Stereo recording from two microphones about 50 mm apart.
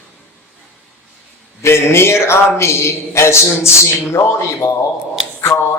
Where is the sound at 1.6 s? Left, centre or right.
Left.